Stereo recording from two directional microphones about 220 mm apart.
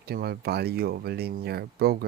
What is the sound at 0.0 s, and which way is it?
Speech, 45° right (ahead or behind).